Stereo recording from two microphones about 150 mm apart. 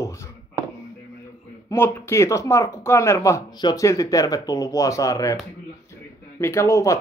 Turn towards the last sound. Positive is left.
turn(degrees=20)  # may be behind; listen again after turning